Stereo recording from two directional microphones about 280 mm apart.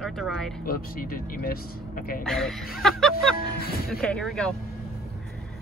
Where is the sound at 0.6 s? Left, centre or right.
Left.